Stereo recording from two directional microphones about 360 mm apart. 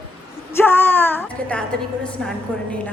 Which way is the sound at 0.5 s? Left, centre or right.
Centre.